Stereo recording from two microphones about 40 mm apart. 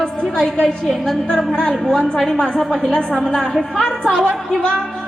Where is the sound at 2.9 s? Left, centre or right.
Left.